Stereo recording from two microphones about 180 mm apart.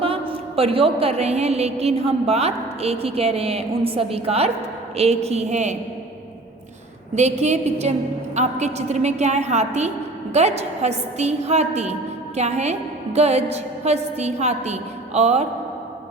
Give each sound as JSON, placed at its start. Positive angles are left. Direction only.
{"t": 0.0, "sound": "a woman's voice", "side_deg": -35}
{"t": 7.2, "sound": "a woman's voice", "side_deg": -40}